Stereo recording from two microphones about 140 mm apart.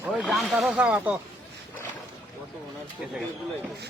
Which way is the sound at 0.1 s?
Centre (ahead or behind).